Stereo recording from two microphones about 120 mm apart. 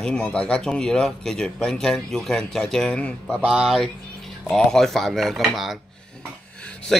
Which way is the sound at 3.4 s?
5° right (ahead or behind).